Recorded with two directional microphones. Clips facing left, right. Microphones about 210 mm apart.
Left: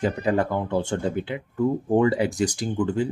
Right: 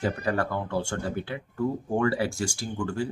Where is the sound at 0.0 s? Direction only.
20° left (ahead or behind).